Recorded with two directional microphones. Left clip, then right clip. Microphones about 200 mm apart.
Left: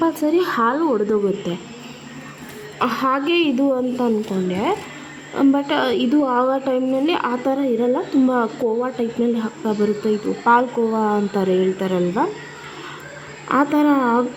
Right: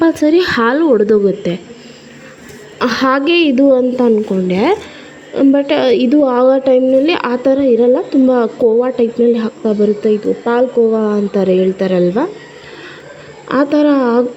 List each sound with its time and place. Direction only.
0.0 s a woman's voice: 25° right (ahead or behind)
2.7 s a woman's voice: 25° right (ahead or behind)
5.3 s a woman's voice: 15° right (ahead or behind)
13.5 s a woman's voice: 20° right (ahead or behind)